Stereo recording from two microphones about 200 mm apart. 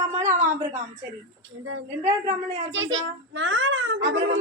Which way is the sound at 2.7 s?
70° right (ahead or behind).